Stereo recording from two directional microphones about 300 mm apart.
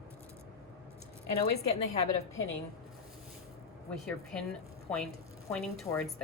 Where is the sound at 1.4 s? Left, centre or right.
Left.